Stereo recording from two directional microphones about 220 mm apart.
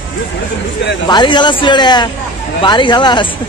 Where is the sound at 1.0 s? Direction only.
20° left (ahead or behind).